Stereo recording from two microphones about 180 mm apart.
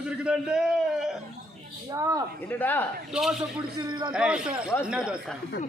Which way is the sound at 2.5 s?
10° left (ahead or behind).